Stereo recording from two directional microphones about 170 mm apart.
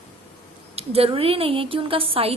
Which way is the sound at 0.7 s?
35° right (ahead or behind).